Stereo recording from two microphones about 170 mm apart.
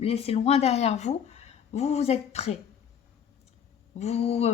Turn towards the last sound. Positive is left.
turn(degrees=40)  # may be behind; listen again after turning